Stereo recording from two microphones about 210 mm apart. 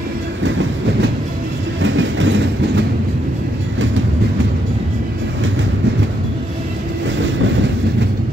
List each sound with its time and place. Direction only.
1.8 s train: 60° right (ahead or behind)